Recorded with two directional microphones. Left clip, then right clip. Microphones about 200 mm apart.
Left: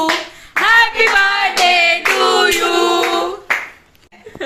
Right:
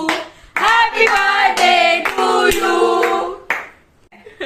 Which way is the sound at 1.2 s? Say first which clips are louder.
Even; 10° right (ahead or behind).